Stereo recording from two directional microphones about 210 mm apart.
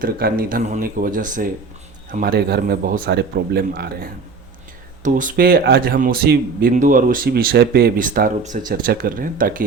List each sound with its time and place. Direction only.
0.0 s speech: 45° right (ahead or behind)